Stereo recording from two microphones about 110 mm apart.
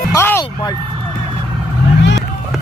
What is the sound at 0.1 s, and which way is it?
Vehicle, 25° left (ahead or behind).